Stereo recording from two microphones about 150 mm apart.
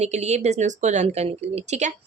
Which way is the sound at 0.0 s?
50° right (ahead or behind).